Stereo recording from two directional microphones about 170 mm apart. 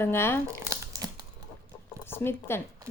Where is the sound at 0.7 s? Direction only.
20° right (ahead or behind).